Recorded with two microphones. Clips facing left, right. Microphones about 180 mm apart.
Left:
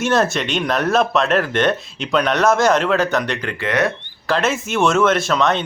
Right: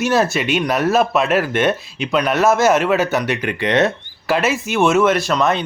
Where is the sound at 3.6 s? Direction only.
25° right (ahead or behind).